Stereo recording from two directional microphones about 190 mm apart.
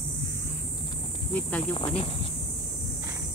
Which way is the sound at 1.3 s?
5° left (ahead or behind).